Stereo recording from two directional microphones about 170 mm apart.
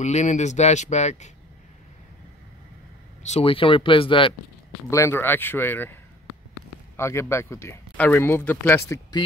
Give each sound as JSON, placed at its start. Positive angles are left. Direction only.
{"t": 0.0, "sound": "speech", "side_deg": 45}
{"t": 3.3, "sound": "speech", "side_deg": 35}
{"t": 4.8, "sound": "speech", "side_deg": 15}
{"t": 7.0, "sound": "speech", "side_deg": 15}